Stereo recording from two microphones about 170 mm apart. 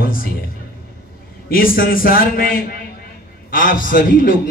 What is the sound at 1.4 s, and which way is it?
A man's voice, 60° left (ahead or behind).